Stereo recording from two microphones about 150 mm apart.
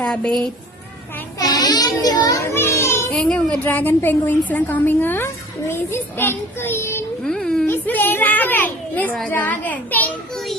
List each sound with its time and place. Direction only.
0.0 s speech: 5° left (ahead or behind)
1.4 s a child's voice: 25° left (ahead or behind)
3.2 s a woman's voice: 5° left (ahead or behind)
7.3 s a child's voice: 5° left (ahead or behind)